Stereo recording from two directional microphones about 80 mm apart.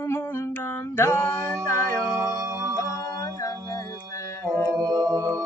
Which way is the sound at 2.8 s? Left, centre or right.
Left.